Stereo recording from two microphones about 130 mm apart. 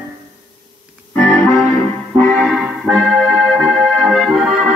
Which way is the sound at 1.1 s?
20° left (ahead or behind).